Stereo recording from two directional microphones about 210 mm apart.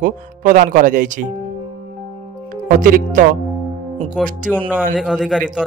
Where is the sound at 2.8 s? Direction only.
40° right (ahead or behind).